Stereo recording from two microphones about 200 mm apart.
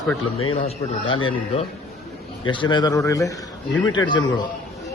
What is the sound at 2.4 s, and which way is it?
A man's voice, 25° left (ahead or behind).